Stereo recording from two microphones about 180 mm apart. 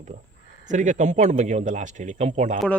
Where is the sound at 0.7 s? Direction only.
45° right (ahead or behind).